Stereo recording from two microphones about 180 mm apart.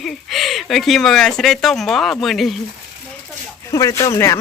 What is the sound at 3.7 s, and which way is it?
Speech, 15° left (ahead or behind).